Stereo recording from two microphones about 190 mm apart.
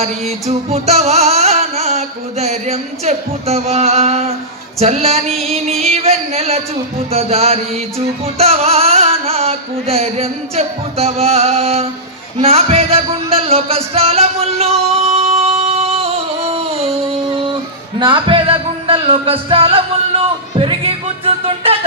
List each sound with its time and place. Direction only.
0.0 s music: 35° right (ahead or behind)
15.4 s a sound: 30° right (ahead or behind)
18.0 s music: 25° right (ahead or behind)